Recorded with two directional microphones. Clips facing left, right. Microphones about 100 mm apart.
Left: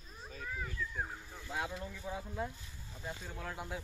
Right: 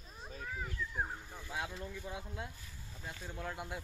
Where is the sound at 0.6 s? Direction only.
15° right (ahead or behind).